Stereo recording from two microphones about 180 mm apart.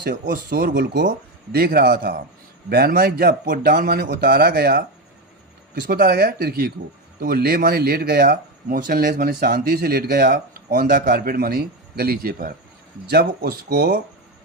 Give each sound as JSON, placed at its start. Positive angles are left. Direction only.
{"t": 0.0, "sound": "speech", "side_deg": -55}
{"t": 5.9, "sound": "speech", "side_deg": -55}